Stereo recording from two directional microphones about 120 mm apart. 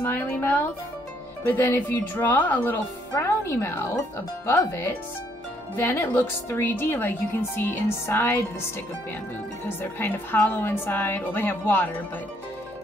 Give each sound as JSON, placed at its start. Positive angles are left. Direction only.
{"t": 0.0, "sound": "speech", "side_deg": 15}
{"t": 9.8, "sound": "speech", "side_deg": 15}